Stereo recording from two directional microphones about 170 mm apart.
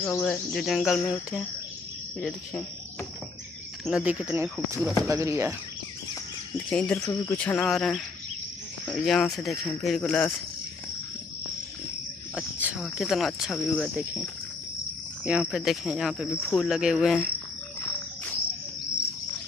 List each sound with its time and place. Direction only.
0.0 s speech: 10° left (ahead or behind)
2.1 s speech: centre (ahead or behind)
3.8 s speech: 5° right (ahead or behind)
6.7 s speech: 5° left (ahead or behind)
7.0 s speech: 20° left (ahead or behind)
12.4 s cricket: 5° right (ahead or behind)
12.8 s speech: centre (ahead or behind)
15.2 s speech: 5° right (ahead or behind)